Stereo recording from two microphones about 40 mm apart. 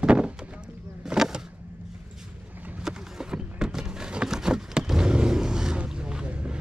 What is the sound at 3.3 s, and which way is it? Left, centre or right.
Horse, centre.